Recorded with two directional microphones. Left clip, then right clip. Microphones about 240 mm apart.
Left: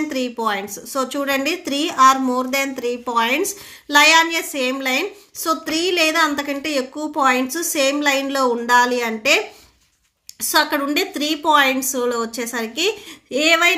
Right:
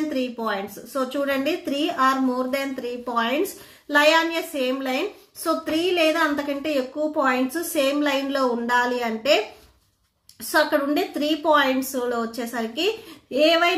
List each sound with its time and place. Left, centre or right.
0.1 s a woman's voice: left
10.5 s a woman's voice: left